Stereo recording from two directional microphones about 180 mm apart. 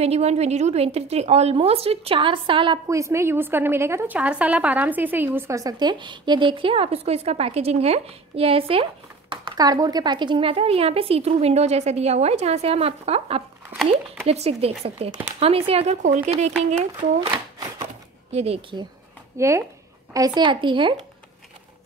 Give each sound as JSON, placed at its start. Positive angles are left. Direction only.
{"t": 0.0, "sound": "a woman's voice", "side_deg": -35}
{"t": 2.9, "sound": "a woman's voice", "side_deg": -15}
{"t": 18.3, "sound": "a woman's voice", "side_deg": -35}
{"t": 19.3, "sound": "speech", "side_deg": -15}